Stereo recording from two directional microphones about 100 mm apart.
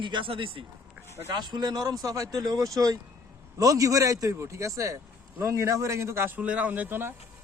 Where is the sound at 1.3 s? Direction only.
45° right (ahead or behind); by 7.1 s 20° right (ahead or behind).